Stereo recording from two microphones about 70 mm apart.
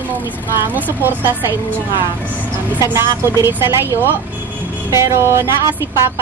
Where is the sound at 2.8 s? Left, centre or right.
Right.